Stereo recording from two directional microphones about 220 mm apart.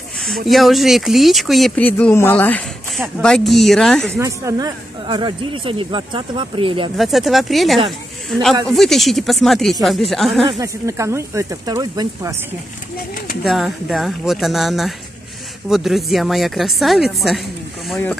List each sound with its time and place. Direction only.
0.5 s speech: centre (ahead or behind)
4.1 s speech: 15° right (ahead or behind)
7.0 s speech: centre (ahead or behind)
10.6 s speech: 15° right (ahead or behind)
12.9 s speech: 45° left (ahead or behind)
13.4 s speech: centre (ahead or behind)